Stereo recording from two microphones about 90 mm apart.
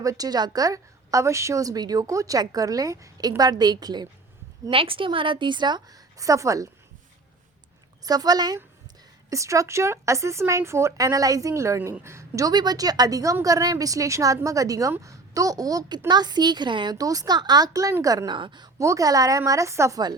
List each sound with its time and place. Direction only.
0.0 s a woman's voice: 40° right (ahead or behind)
4.7 s a woman's voice: 80° right; by 6.0 s 55° right (ahead or behind)
6.1 s speech: 35° right (ahead or behind)
8.0 s a woman's voice: 45° right (ahead or behind)
9.3 s a woman's voice: 35° right (ahead or behind)
12.5 s a woman's voice: 45° right (ahead or behind)
18.3 s a woman's voice: 60° right (ahead or behind)
18.8 s speech: 35° right (ahead or behind)